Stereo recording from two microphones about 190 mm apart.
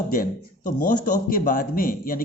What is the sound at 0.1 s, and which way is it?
A man's voice, 50° left (ahead or behind).